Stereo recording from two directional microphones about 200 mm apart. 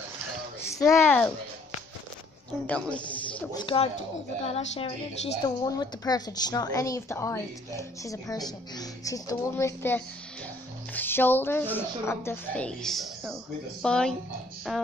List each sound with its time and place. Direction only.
0.9 s speech: 10° left (ahead or behind)
2.6 s speech: 5° left (ahead or behind)
3.5 s a woman's voice: 25° left (ahead or behind)
5.4 s speech: 20° left (ahead or behind); by 14.8 s centre (ahead or behind)